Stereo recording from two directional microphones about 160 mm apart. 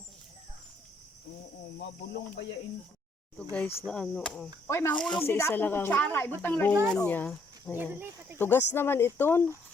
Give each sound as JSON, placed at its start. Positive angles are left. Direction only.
{"t": 3.8, "sound": "cricket", "side_deg": 5}
{"t": 4.7, "sound": "speech", "side_deg": 15}
{"t": 4.9, "sound": "cricket", "side_deg": 5}
{"t": 5.2, "sound": "speech", "side_deg": 15}
{"t": 7.8, "sound": "speech", "side_deg": -10}
{"t": 8.4, "sound": "speech", "side_deg": 15}